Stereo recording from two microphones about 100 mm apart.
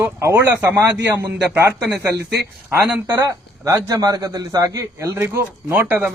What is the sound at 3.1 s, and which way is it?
A man's voice, 30° right (ahead or behind).